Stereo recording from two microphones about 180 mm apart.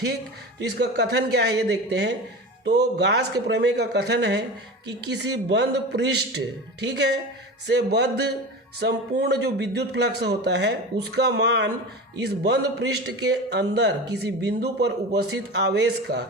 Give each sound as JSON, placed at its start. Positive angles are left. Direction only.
{"t": 0.6, "sound": "speech", "side_deg": -65}